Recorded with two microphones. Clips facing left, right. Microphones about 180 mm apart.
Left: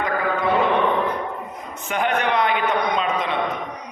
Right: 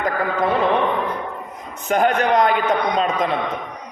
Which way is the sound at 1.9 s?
40° right (ahead or behind).